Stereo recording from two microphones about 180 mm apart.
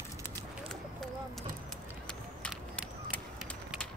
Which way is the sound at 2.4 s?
5° left (ahead or behind).